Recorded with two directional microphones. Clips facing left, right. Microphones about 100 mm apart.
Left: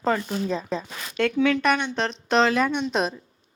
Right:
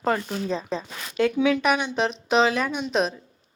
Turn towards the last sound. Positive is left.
turn(degrees=0)  # may be behind; listen again after turning